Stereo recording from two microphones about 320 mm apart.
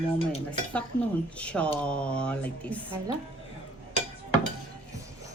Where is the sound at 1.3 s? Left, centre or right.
Centre.